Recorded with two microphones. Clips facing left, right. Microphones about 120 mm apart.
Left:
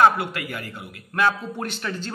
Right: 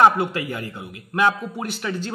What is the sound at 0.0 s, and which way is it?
A man's voice, 20° right (ahead or behind).